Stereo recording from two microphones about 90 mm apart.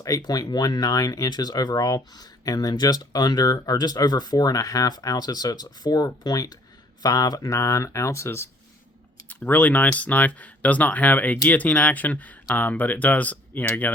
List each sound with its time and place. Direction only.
0.2 s speech: 50° left (ahead or behind); by 8.4 s 30° left (ahead or behind)
9.3 s speech: 20° left (ahead or behind)